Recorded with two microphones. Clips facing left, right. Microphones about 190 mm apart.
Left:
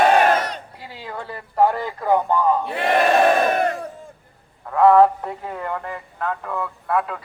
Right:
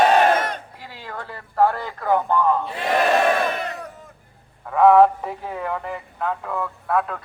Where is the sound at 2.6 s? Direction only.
60° left (ahead or behind).